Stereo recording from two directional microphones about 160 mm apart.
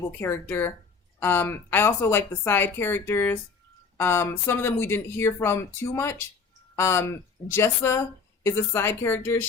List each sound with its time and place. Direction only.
0.2 s speech: 15° left (ahead or behind)